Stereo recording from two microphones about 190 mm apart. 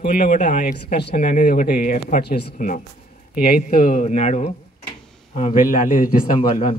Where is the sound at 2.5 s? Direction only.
40° left (ahead or behind).